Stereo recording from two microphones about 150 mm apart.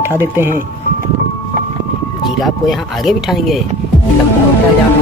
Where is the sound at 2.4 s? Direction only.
Centre (ahead or behind).